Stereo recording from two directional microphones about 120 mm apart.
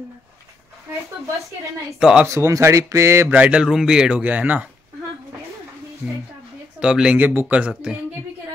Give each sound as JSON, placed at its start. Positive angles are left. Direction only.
{"t": 1.9, "sound": "speech", "side_deg": -5}
{"t": 2.2, "sound": "a man's voice", "side_deg": -25}
{"t": 6.0, "sound": "a man's voice", "side_deg": 0}